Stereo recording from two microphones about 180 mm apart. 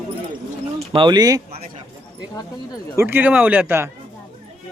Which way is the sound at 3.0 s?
10° right (ahead or behind).